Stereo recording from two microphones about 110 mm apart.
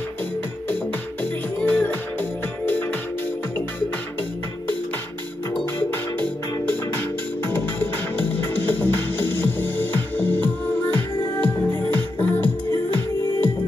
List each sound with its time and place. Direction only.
1.2 s music: 15° left (ahead or behind)
5.8 s music: 15° left (ahead or behind)